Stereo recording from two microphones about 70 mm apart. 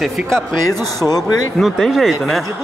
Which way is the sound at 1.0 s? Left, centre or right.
Left.